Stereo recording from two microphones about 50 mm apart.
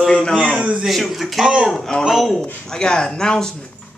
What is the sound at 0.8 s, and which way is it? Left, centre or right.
Speech, centre.